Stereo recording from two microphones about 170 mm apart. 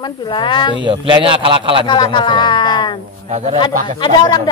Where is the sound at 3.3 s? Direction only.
40° right (ahead or behind).